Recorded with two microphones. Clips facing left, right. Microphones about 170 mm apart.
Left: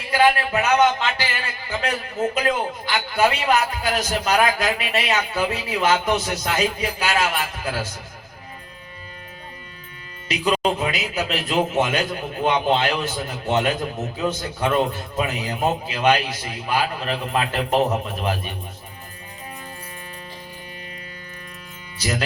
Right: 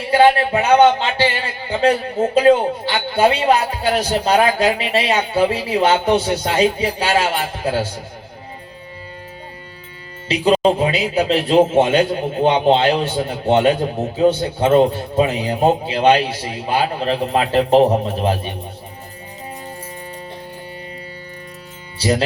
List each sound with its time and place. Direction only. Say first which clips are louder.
0.0 s a man's voice: right 6 dB; 30° right (ahead or behind)
10.2 s a man's voice: right 7 dB; 30° right (ahead or behind)
21.9 s speech: right 8 dB; 30° right (ahead or behind)